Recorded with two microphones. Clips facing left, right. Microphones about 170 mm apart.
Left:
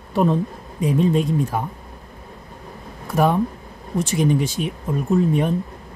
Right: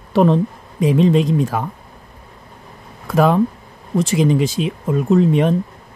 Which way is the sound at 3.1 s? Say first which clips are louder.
Right 4 dB; 90° right.